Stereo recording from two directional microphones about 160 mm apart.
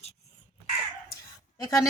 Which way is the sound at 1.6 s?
20° left (ahead or behind).